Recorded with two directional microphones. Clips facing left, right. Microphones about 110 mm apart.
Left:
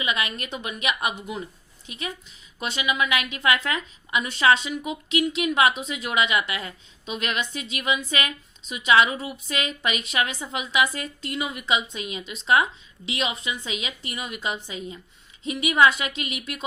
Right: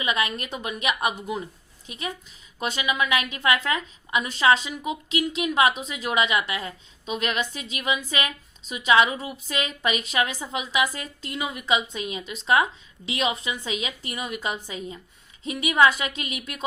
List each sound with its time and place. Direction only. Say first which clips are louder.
0.0 s a woman's voice: right 2 dB; 35° right (ahead or behind)